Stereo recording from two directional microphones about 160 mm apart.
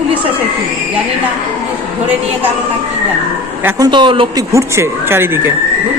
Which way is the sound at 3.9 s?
30° right (ahead or behind).